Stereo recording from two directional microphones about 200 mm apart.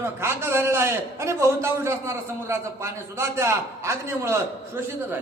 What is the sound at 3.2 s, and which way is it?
A man's voice, 15° right (ahead or behind).